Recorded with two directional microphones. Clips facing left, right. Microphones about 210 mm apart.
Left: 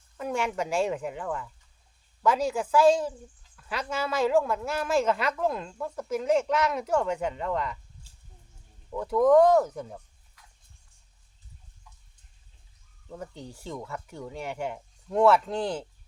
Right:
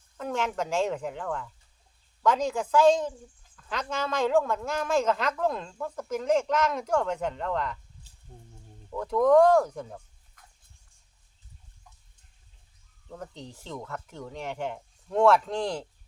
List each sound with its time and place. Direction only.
0.2 s speech: 10° left (ahead or behind)
8.3 s speech: 45° right (ahead or behind)
8.9 s speech: 5° left (ahead or behind)
10.4 s a sound: 50° right (ahead or behind)
13.1 s speech: 5° left (ahead or behind)